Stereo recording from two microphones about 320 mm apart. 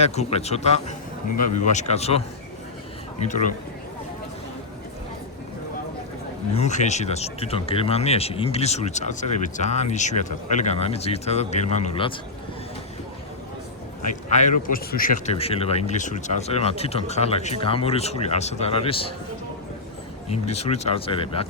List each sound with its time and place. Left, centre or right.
0.0 s speech: centre
6.5 s speech: left
14.3 s speech: left
20.3 s speech: centre